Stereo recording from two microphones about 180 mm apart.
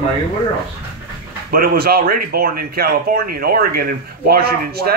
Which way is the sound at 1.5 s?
55° right (ahead or behind).